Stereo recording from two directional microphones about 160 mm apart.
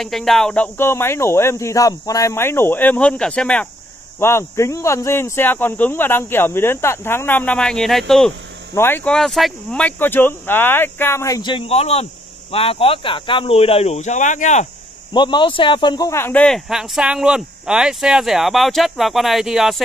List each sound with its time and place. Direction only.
0.0 s speech: centre (ahead or behind); by 14.7 s 50° left (ahead or behind)
15.1 s speech: 30° left (ahead or behind)
16.2 s speech: 10° left (ahead or behind)